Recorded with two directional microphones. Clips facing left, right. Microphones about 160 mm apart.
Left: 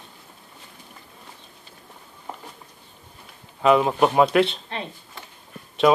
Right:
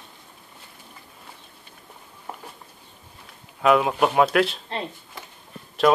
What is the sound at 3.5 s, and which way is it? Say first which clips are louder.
Speech: left 1 dB; centre (ahead or behind).